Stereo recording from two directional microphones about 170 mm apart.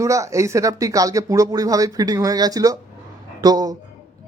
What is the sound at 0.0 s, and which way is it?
A man's voice, 20° right (ahead or behind).